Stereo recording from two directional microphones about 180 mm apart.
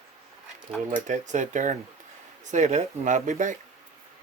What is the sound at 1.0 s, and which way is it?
Speech, 45° right (ahead or behind).